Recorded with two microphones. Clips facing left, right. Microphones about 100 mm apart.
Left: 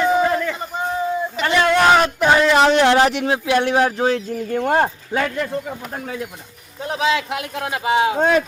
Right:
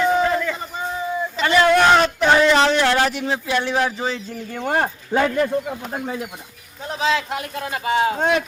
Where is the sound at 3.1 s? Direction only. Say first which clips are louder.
Left 4 dB; 90° left.